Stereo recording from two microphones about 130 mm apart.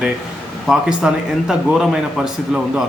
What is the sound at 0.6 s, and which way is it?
A man's voice, 5° right (ahead or behind).